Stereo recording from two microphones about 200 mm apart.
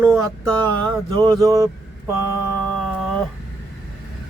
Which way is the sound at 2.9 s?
Centre (ahead or behind).